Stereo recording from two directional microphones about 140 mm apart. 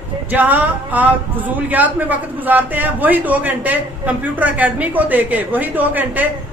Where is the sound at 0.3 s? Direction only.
10° right (ahead or behind).